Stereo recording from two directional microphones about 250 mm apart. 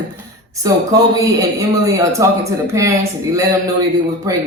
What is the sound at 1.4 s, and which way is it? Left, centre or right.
Speech, centre.